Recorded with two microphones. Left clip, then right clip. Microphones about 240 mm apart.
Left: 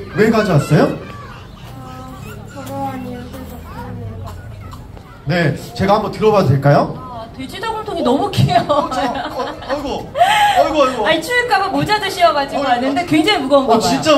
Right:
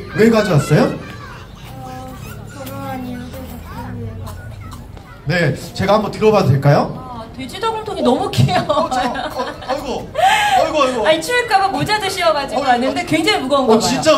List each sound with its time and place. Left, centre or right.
0.1 s a man's voice: right
5.3 s a man's voice: right
7.9 s speech: right